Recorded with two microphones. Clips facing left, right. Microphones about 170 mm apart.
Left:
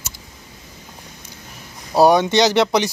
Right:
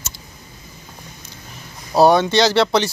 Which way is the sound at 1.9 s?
10° left (ahead or behind).